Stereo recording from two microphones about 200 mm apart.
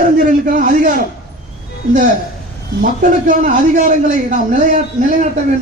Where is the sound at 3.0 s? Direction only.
40° right (ahead or behind).